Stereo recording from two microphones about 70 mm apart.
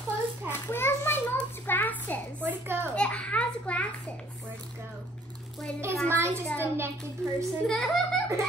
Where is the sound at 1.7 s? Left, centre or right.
Left.